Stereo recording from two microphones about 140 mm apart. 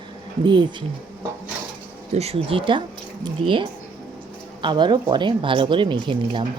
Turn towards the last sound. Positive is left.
turn(degrees=-35)  # may be behind; listen again after turning